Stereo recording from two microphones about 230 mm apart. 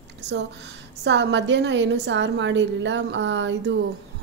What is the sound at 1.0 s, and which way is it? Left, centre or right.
Speech, right.